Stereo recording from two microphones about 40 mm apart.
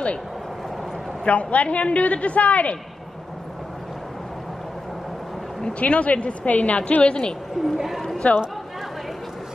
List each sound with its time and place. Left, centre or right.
1.2 s a man's voice: left
5.6 s a man's voice: left
6.9 s a woman's voice: left
7.6 s speech: centre
8.2 s a man's voice: left